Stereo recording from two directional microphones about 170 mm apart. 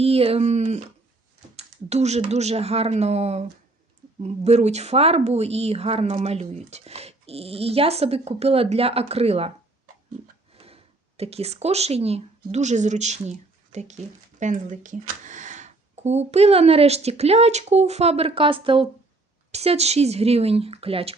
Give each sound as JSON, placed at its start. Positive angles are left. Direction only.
{"t": 0.0, "sound": "a woman's voice", "side_deg": -35}
{"t": 10.5, "sound": "a woman's voice", "side_deg": -35}